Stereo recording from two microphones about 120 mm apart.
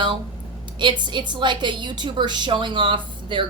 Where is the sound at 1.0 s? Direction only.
40° right (ahead or behind).